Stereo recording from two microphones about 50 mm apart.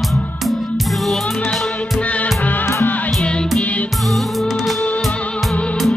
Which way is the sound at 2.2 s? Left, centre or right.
Left.